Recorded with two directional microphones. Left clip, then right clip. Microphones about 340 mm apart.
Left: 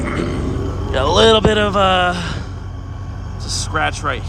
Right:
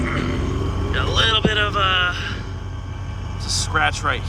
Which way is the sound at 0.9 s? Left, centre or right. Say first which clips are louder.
Left 7 dB; centre.